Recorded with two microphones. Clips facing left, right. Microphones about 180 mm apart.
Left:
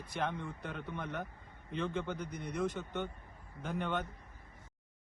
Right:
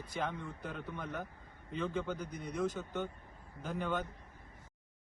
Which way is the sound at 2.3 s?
70° left (ahead or behind).